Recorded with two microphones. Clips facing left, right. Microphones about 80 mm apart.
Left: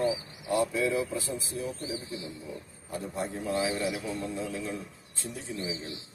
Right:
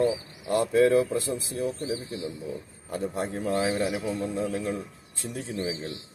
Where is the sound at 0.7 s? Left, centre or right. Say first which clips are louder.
Right 8 dB; right.